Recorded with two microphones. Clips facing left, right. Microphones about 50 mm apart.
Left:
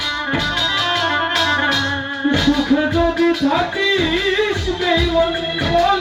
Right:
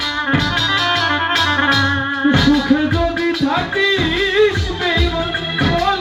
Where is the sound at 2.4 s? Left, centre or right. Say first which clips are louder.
Right 2 dB; centre.